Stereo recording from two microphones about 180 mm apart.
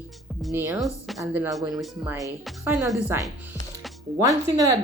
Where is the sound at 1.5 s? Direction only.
Centre (ahead or behind).